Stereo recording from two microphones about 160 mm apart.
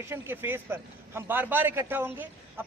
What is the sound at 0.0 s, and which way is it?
Speech, 15° right (ahead or behind).